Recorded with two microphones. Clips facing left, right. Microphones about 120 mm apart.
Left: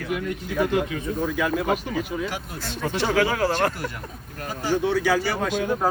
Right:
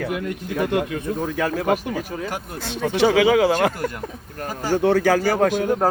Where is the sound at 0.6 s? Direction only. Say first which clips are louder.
Right 1 dB; 60° right (ahead or behind).